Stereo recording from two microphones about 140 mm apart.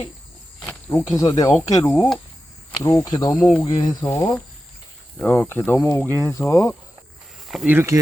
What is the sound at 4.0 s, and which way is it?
Speech, 15° left (ahead or behind).